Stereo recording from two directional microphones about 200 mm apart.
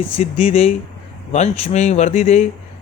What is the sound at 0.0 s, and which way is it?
Speech, 30° left (ahead or behind).